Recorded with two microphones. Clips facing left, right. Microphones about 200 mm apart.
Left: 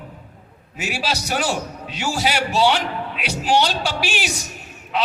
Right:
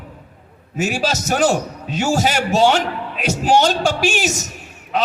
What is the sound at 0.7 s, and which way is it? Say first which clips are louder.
A man's voice: right 6 dB; 45° right (ahead or behind).